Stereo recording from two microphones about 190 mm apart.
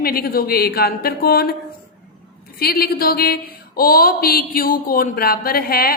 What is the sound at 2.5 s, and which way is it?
Speech, 55° left (ahead or behind).